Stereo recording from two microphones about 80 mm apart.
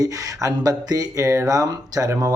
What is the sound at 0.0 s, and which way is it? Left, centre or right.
Speech, right.